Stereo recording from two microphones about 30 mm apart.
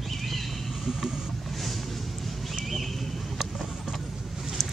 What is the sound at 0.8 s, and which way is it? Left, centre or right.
Vehicle, centre.